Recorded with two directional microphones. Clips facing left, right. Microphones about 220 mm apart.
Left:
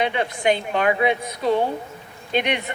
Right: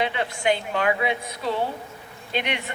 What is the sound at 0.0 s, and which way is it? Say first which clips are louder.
Speech: left 3 dB; 20° left (ahead or behind).